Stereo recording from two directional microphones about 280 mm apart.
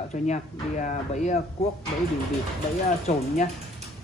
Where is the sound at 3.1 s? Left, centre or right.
Left.